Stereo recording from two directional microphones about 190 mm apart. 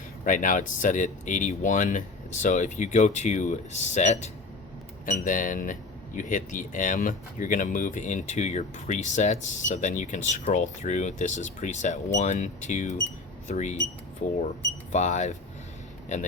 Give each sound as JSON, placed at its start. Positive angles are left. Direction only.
{"t": 0.3, "sound": "speech", "side_deg": 45}
{"t": 14.9, "sound": "speech", "side_deg": 40}